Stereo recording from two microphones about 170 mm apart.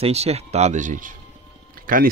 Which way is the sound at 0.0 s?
40° right (ahead or behind).